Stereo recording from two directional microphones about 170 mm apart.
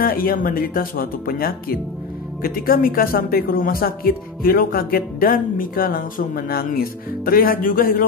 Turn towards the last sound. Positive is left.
turn(degrees=60)  # may be behind; listen again after turning